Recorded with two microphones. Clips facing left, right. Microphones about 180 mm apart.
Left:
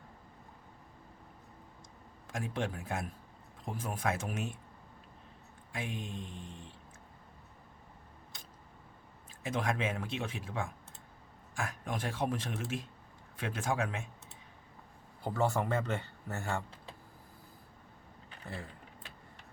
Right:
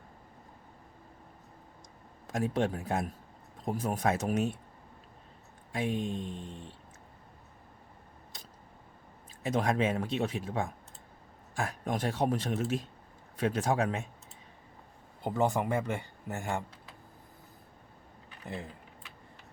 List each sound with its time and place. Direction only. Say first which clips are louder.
2.2 s speech: right 7 dB; 40° right (ahead or behind)
5.7 s speech: right 8 dB; 35° right (ahead or behind)
9.4 s speech: right 5 dB; 40° right (ahead or behind)
15.2 s speech: right 3 dB; 20° right (ahead or behind)
18.4 s speech: right 4 dB; 20° right (ahead or behind)